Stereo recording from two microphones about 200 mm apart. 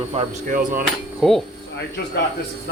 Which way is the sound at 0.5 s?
45° right (ahead or behind).